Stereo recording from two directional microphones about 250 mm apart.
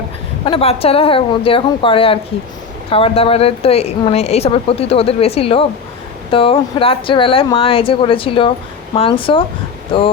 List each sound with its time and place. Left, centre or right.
0.4 s a woman's voice: left